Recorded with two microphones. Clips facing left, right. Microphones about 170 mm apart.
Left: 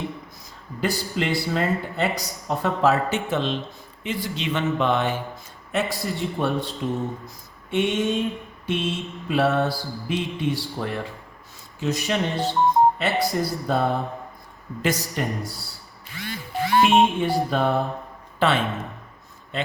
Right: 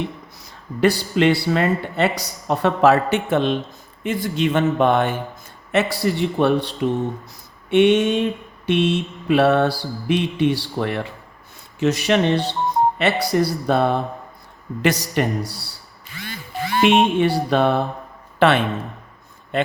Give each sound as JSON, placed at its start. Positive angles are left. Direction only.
{"t": 0.4, "sound": "speech", "side_deg": -70}
{"t": 5.7, "sound": "speech", "side_deg": -75}
{"t": 16.8, "sound": "speech", "side_deg": -75}
{"t": 18.3, "sound": "a man's voice", "side_deg": -65}